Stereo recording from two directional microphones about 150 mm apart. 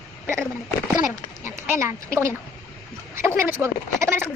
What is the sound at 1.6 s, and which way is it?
Speech, 20° right (ahead or behind).